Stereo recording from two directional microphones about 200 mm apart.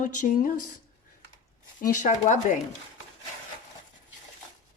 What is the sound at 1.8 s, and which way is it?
Speech, 40° left (ahead or behind).